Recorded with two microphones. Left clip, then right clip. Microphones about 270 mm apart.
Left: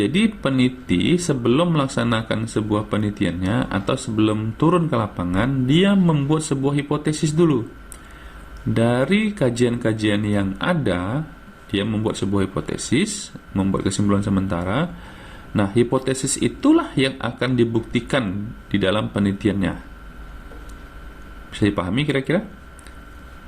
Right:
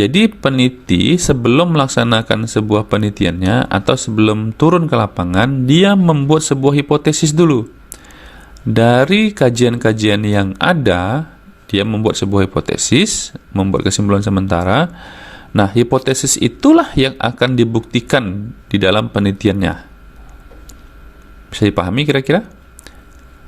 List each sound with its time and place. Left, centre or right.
0.0 s speech: right
8.7 s speech: right
21.5 s speech: right